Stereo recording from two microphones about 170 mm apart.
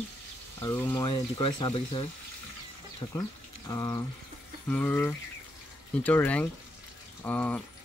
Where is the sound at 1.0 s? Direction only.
30° left (ahead or behind).